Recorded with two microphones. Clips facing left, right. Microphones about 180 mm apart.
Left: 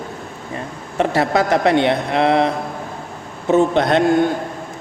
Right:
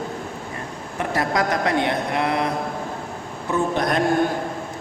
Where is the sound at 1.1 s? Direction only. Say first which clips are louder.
Left 4 dB; 25° left (ahead or behind).